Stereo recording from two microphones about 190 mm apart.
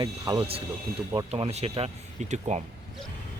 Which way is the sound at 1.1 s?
30° right (ahead or behind).